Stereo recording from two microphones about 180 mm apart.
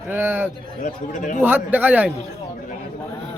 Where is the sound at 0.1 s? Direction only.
10° right (ahead or behind).